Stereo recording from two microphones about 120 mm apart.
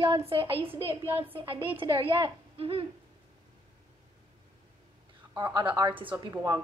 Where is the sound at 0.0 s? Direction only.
50° right (ahead or behind).